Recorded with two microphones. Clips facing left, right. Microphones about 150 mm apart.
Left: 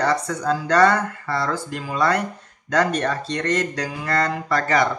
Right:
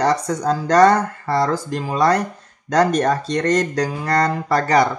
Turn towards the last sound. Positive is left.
turn(degrees=-35)  # may be behind; listen again after turning